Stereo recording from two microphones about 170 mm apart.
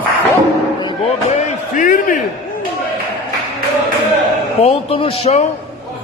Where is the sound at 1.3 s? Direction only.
50° left (ahead or behind).